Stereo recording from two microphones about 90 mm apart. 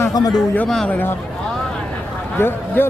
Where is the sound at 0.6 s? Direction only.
5° left (ahead or behind).